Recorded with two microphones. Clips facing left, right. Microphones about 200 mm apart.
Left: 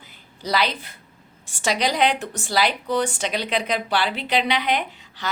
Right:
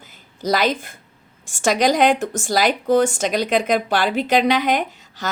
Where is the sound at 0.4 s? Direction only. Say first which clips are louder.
Right 5 dB; 45° right (ahead or behind).